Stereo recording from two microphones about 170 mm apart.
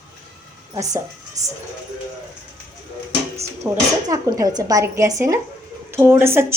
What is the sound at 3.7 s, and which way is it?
A woman's voice, 15° right (ahead or behind).